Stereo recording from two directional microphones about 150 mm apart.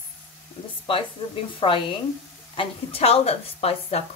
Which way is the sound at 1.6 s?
35° left (ahead or behind).